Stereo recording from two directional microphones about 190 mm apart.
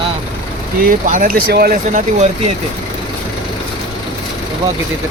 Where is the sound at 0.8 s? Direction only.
45° right (ahead or behind).